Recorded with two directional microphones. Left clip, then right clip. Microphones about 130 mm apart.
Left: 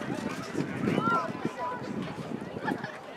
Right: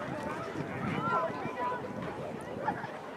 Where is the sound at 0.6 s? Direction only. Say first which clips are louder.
Left 5 dB; 40° left (ahead or behind).